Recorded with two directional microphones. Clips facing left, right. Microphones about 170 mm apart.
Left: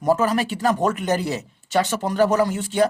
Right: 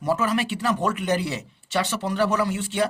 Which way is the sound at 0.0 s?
40° left (ahead or behind).